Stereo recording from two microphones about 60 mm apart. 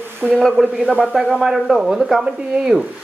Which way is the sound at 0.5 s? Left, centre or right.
Right.